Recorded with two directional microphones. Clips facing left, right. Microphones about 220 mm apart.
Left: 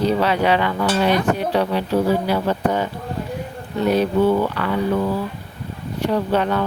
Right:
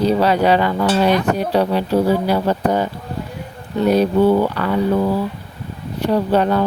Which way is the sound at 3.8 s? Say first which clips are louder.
Right 3 dB; 40° right (ahead or behind).